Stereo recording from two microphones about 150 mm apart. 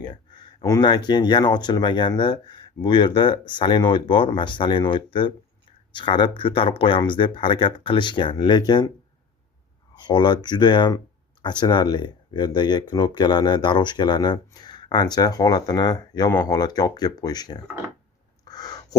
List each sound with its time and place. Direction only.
0.0 s speech: 30° left (ahead or behind)
10.0 s speech: 30° left (ahead or behind)
18.4 s a sound: 25° left (ahead or behind)